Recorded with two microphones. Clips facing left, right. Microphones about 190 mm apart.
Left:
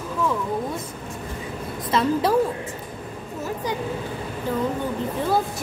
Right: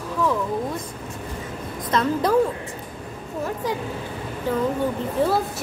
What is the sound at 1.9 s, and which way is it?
Speech, 5° left (ahead or behind).